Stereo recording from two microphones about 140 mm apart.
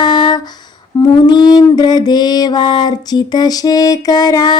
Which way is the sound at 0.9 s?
30° left (ahead or behind).